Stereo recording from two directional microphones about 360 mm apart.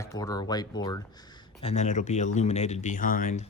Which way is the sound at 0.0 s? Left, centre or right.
Centre.